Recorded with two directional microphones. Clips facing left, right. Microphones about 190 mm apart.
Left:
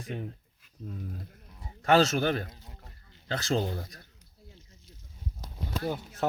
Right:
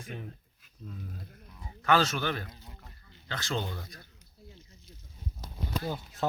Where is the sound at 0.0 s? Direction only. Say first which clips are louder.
Left 5 dB; 35° left (ahead or behind).